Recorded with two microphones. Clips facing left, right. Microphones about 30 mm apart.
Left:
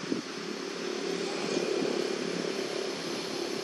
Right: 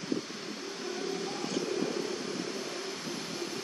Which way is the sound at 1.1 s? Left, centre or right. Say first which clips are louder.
Left 3 dB; left.